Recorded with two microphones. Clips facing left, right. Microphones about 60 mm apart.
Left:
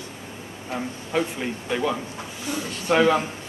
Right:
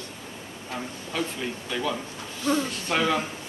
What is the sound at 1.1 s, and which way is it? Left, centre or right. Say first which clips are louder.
A man's voice: left 5 dB; left.